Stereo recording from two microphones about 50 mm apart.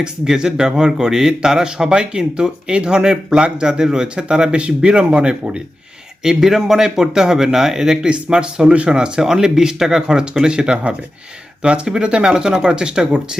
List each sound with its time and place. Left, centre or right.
0.0 s a man's voice: centre
6.2 s a man's voice: centre